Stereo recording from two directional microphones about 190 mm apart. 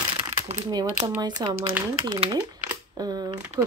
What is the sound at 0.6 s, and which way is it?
Speech, 20° right (ahead or behind).